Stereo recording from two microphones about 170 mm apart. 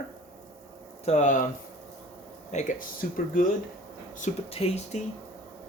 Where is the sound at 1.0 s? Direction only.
45° left (ahead or behind).